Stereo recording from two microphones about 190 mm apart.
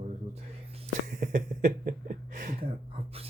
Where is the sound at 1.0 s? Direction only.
45° right (ahead or behind).